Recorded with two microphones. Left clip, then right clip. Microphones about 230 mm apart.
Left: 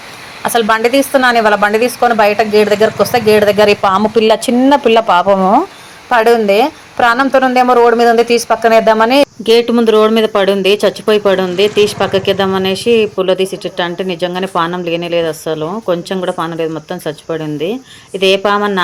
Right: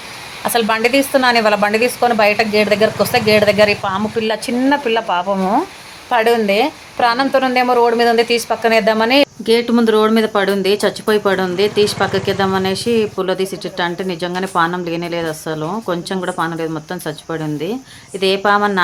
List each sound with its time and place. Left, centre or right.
0.4 s a woman's voice: centre